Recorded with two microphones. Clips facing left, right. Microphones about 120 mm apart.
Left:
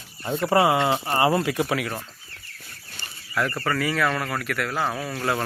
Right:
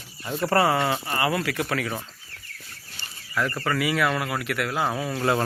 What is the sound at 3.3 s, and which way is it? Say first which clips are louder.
Speech: left 1 dB; centre (ahead or behind).